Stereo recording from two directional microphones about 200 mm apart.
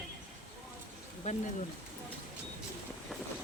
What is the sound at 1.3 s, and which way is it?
Speech, 35° left (ahead or behind).